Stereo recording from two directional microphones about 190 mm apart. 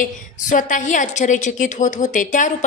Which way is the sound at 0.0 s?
45° left (ahead or behind).